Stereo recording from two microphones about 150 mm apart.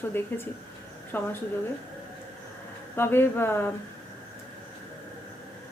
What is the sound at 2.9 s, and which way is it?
Speech, 15° left (ahead or behind).